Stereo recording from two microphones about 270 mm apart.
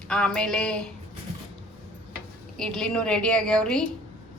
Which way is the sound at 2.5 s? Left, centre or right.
Centre.